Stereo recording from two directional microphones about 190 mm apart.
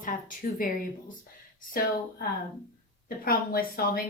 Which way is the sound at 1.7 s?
50° left (ahead or behind).